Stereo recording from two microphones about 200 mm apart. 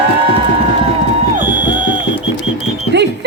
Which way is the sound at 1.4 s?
40° right (ahead or behind).